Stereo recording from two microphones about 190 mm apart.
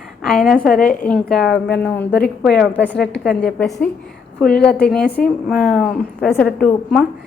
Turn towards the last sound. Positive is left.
turn(degrees=5)  # may be behind; listen again after turning